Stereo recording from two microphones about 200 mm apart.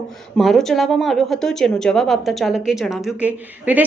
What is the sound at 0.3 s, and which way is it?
A woman's voice, centre (ahead or behind).